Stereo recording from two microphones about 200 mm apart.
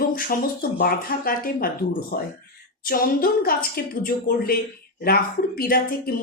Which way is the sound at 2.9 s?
45° left (ahead or behind).